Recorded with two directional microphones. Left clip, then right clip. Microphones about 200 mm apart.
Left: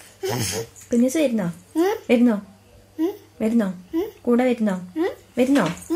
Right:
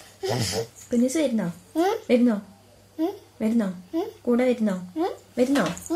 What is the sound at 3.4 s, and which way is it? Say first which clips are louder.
A woman's voice: left 4 dB; 45° left (ahead or behind).